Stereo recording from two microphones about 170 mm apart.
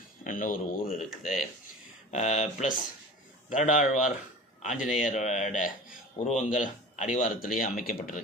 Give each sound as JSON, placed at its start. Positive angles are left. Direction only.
{"t": 0.3, "sound": "speech", "side_deg": 55}
{"t": 0.9, "sound": "speech", "side_deg": 0}
{"t": 2.0, "sound": "speech", "side_deg": 40}